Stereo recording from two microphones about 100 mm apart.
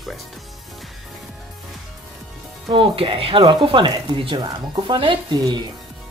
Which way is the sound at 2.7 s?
65° right (ahead or behind).